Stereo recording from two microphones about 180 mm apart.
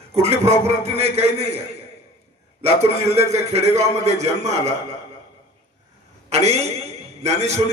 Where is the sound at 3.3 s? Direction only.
35° right (ahead or behind).